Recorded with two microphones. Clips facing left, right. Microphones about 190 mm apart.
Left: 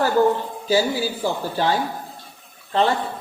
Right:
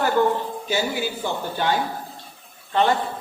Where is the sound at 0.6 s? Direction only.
35° left (ahead or behind).